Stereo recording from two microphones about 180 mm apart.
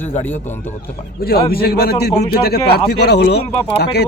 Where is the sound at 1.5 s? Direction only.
60° left (ahead or behind).